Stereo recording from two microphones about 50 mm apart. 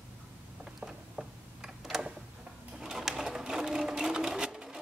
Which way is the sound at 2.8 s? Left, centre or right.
Centre.